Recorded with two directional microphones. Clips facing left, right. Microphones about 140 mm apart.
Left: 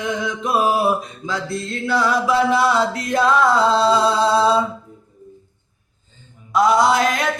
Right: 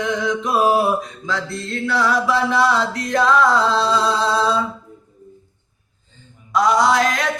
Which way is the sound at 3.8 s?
25° left (ahead or behind).